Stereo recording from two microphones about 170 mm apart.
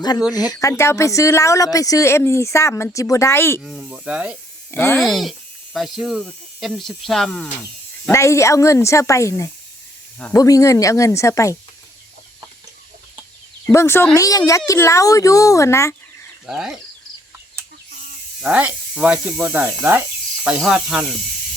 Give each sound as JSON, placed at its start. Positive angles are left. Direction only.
{"t": 0.3, "sound": "speech", "side_deg": 20}
{"t": 3.6, "sound": "speech", "side_deg": 0}
{"t": 4.7, "sound": "speech", "side_deg": 15}
{"t": 4.9, "sound": "speech", "side_deg": 0}
{"t": 8.1, "sound": "speech", "side_deg": 15}
{"t": 13.7, "sound": "speech", "side_deg": 15}
{"t": 16.5, "sound": "speech", "side_deg": 0}
{"t": 18.4, "sound": "speech", "side_deg": -5}